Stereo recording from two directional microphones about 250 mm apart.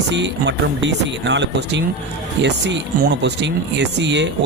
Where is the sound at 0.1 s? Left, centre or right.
Right.